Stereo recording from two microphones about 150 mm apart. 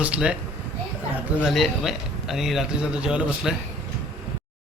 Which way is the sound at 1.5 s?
Centre (ahead or behind).